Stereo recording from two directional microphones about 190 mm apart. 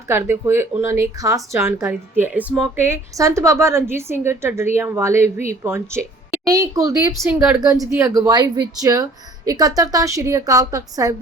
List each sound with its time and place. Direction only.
0.1 s speech: 10° right (ahead or behind)